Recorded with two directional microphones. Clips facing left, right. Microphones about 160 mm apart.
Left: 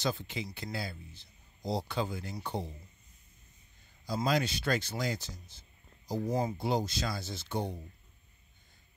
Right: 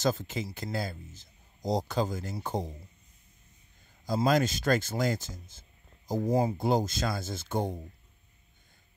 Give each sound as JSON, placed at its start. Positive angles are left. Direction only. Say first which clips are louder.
{"t": 0.0, "sound": "speech", "louder": "right 5 dB", "side_deg": -45}
{"t": 4.0, "sound": "speech", "louder": "right 5 dB", "side_deg": -45}